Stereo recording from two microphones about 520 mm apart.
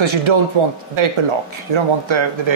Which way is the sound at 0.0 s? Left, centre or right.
Right.